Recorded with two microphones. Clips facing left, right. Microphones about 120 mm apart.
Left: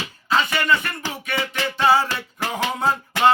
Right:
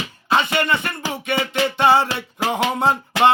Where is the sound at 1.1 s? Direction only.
25° right (ahead or behind).